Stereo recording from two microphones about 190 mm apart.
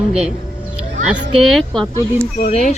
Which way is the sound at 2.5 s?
35° left (ahead or behind).